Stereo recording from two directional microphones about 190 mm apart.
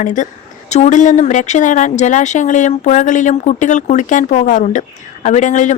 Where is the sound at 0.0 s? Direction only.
40° left (ahead or behind).